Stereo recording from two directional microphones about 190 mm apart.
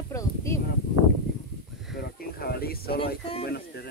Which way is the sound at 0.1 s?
15° left (ahead or behind).